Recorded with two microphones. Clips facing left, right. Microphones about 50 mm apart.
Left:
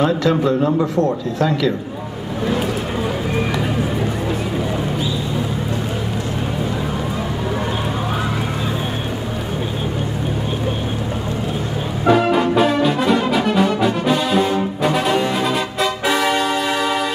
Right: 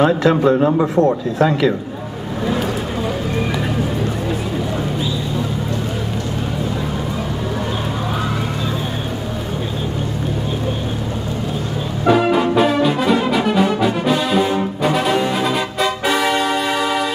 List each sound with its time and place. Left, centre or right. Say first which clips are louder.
0.0 s speech: right 3 dB; right
12.1 s brass instrument: even; centre